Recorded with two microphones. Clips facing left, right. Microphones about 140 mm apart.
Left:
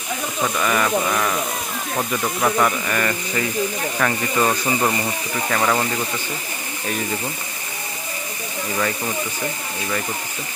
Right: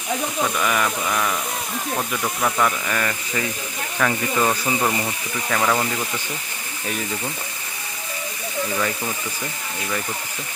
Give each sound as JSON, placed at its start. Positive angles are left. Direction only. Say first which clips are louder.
{"t": 0.5, "sound": "speech", "louder": "left 3 dB", "side_deg": 0}